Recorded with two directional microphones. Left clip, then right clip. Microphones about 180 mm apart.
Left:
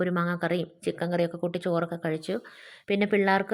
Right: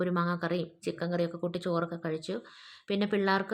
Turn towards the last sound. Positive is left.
turn(degrees=20)  # may be behind; listen again after turning